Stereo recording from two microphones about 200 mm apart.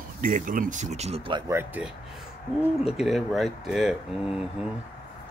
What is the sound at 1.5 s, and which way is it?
Speech, 10° right (ahead or behind).